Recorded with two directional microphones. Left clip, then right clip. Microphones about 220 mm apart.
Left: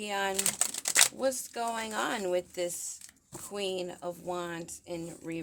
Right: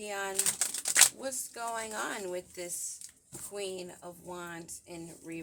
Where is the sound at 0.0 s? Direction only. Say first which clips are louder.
Left 5 dB; 40° left (ahead or behind).